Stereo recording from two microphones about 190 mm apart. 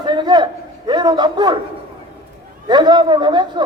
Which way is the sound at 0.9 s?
25° right (ahead or behind).